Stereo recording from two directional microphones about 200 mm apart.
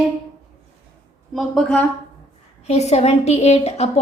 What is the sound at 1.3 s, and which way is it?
Speech, centre (ahead or behind).